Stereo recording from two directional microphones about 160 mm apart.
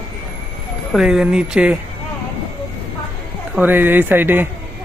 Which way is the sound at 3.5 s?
10° right (ahead or behind).